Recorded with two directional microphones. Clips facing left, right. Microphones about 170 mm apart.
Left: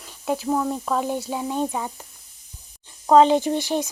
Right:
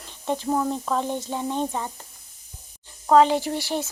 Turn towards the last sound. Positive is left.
turn(degrees=20)  # may be behind; listen again after turning